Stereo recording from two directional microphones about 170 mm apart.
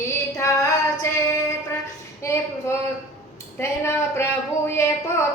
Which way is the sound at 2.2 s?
15° left (ahead or behind).